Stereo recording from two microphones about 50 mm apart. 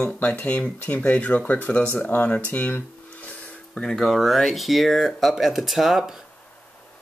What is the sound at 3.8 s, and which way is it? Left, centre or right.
Speech, centre.